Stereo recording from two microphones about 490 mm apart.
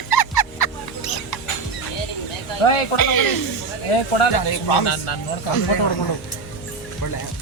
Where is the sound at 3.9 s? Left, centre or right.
Left.